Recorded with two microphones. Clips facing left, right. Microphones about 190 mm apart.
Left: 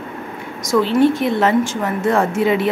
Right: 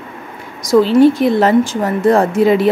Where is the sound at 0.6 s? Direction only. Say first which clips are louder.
Right 5 dB; 35° right (ahead or behind).